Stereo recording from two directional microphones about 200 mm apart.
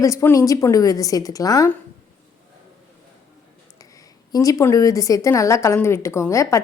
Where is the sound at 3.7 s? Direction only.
15° left (ahead or behind).